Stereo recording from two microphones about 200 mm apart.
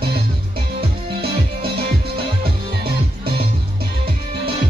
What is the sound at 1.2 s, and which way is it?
Music, 50° right (ahead or behind).